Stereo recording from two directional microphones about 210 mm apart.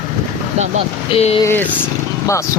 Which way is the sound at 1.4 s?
10° left (ahead or behind).